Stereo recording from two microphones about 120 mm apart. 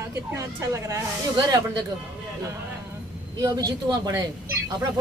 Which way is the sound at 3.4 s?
30° right (ahead or behind).